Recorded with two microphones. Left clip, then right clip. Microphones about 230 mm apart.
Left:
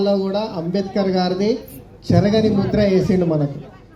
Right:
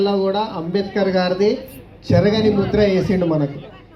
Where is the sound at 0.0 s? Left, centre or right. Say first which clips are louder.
Right 1 dB; left.